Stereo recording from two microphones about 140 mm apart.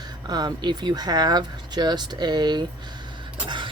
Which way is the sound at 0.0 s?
30° right (ahead or behind).